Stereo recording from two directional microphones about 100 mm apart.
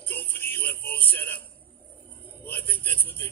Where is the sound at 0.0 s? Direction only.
20° left (ahead or behind).